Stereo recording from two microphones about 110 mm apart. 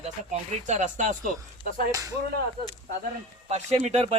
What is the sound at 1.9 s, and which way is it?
Speech, 30° right (ahead or behind).